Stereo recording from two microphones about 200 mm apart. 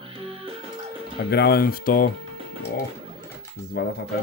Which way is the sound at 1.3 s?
55° left (ahead or behind).